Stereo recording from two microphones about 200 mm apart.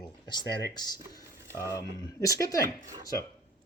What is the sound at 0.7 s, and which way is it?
Speech, 20° left (ahead or behind).